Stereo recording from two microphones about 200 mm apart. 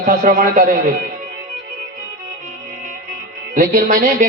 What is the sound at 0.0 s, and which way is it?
Speech, 40° right (ahead or behind).